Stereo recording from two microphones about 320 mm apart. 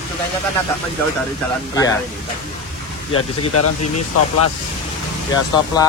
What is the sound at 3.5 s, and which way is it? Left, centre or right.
Speech, left.